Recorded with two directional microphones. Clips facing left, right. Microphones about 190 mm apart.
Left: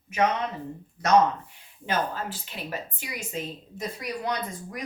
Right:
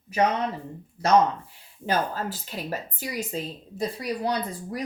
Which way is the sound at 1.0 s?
30° right (ahead or behind).